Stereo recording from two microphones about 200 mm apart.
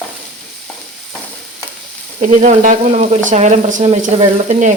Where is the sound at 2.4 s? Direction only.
40° right (ahead or behind).